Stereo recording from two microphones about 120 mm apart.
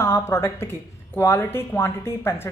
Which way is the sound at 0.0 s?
25° left (ahead or behind).